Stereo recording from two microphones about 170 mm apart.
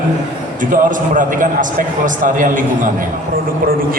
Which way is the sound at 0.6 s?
50° right (ahead or behind).